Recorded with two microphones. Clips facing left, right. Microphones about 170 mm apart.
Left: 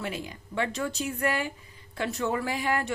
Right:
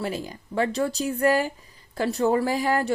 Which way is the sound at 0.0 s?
35° right (ahead or behind).